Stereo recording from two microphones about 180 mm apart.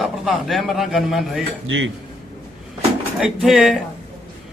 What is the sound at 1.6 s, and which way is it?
Speech, 90° right.